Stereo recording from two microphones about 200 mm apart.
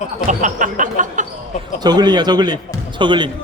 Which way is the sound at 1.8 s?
20° right (ahead or behind).